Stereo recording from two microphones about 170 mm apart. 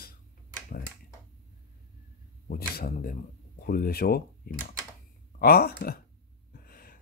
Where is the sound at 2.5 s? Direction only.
60° left (ahead or behind).